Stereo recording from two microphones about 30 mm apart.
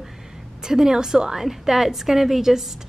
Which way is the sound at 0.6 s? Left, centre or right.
Centre.